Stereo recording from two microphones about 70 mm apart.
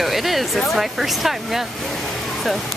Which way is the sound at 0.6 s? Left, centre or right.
Centre.